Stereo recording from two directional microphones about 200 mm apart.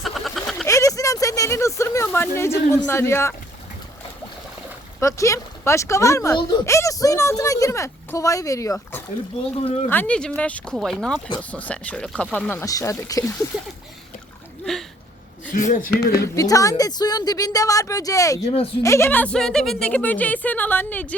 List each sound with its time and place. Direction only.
0.0 s a sound: centre (ahead or behind)
0.7 s a sound: 15° left (ahead or behind)
4.9 s speech: 15° left (ahead or behind)
9.6 s speech: 30° left (ahead or behind)
9.9 s speech: 5° left (ahead or behind)
14.6 s speech: centre (ahead or behind)
15.5 s speech: 40° left (ahead or behind)
16.1 s speech: 15° left (ahead or behind)
18.4 s speech: 30° left (ahead or behind)
18.8 s speech: 15° left (ahead or behind)